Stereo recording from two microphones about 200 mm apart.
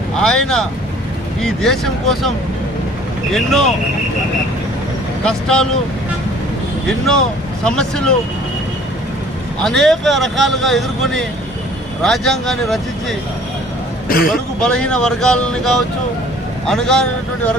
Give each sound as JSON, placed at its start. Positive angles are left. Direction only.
{"t": 0.2, "sound": "speech", "side_deg": 5}
{"t": 3.3, "sound": "speech", "side_deg": 0}
{"t": 5.2, "sound": "speech", "side_deg": 5}
{"t": 7.6, "sound": "speech", "side_deg": 5}
{"t": 9.6, "sound": "speech", "side_deg": 0}
{"t": 14.1, "sound": "a man's voice", "side_deg": 45}
{"t": 14.6, "sound": "speech", "side_deg": 5}